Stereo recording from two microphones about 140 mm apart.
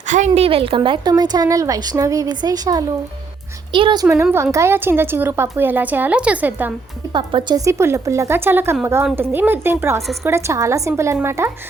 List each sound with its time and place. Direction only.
0.1 s speech: 60° right (ahead or behind)
0.4 s a woman's voice: 40° right (ahead or behind)
4.1 s a woman's voice: 20° right (ahead or behind)
7.1 s a woman's voice: 35° right (ahead or behind); by 11.5 s 20° right (ahead or behind)